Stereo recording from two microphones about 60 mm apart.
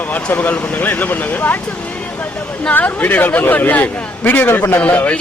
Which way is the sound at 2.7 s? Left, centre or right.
Left.